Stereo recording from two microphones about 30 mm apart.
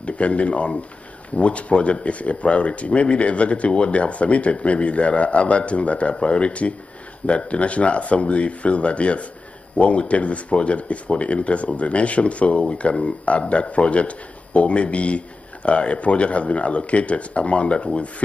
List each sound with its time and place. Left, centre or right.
0.0 s speech: left